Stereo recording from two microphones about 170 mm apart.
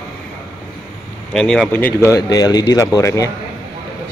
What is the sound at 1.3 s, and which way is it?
Speech, 5° left (ahead or behind).